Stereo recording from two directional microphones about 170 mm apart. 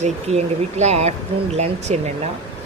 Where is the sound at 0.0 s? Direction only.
40° right (ahead or behind).